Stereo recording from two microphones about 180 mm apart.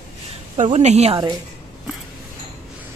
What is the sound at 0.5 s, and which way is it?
Speech, 40° right (ahead or behind).